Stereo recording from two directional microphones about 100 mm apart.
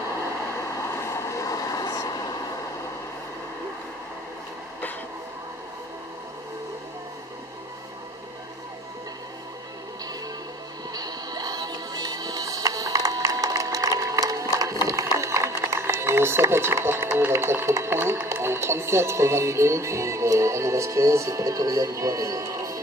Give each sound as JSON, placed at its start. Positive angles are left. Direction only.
{"t": 0.7, "sound": "vehicle", "side_deg": 30}
{"t": 10.9, "sound": "music", "side_deg": -40}
{"t": 14.9, "sound": "a sound", "side_deg": -30}